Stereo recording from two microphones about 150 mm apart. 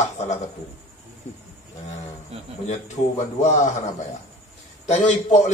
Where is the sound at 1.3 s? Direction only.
45° left (ahead or behind).